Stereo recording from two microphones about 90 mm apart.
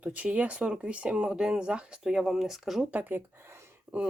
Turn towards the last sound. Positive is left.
turn(degrees=-20)  # may be behind; listen again after turning